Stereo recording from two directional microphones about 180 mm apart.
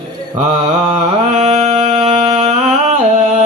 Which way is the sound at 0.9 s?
40° right (ahead or behind).